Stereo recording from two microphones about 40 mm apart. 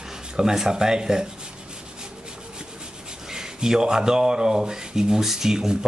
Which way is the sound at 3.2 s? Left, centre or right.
Centre.